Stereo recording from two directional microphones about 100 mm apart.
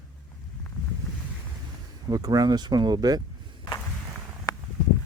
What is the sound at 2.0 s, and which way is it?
Speech, 40° right (ahead or behind).